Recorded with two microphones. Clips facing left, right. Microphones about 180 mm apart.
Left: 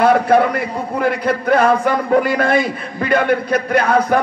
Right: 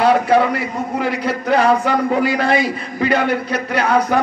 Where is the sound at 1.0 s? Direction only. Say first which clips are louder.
Left 6 dB; 50° left (ahead or behind).